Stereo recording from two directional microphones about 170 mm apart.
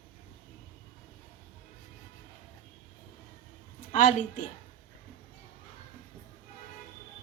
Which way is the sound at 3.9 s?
45° left (ahead or behind).